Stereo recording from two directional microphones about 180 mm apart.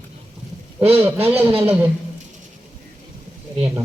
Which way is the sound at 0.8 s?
10° right (ahead or behind).